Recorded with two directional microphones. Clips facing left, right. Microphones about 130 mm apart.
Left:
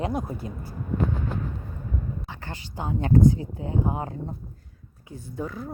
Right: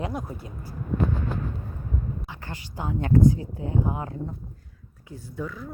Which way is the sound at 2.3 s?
30° left (ahead or behind).